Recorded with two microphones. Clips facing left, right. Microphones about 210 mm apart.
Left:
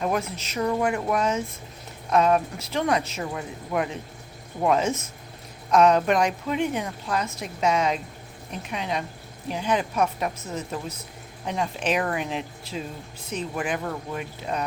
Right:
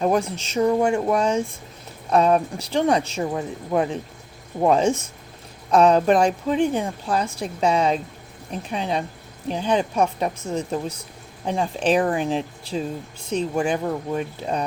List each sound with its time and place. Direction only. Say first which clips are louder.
0.0 s speech: right 5 dB; 30° right (ahead or behind)